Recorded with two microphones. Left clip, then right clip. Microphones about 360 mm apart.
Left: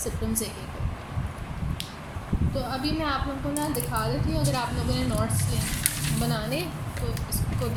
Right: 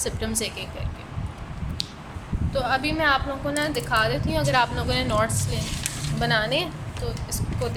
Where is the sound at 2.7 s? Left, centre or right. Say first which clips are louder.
Right 7 dB; right.